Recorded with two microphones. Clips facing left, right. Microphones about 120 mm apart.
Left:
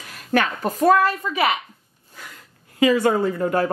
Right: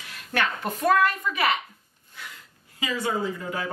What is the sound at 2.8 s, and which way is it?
Speech, 60° left (ahead or behind).